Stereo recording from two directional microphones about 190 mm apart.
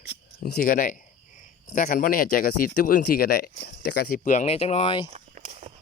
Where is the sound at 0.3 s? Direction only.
55° left (ahead or behind); by 5.0 s 30° left (ahead or behind).